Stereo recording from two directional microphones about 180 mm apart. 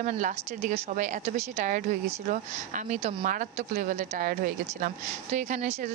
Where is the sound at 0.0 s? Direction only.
45° right (ahead or behind).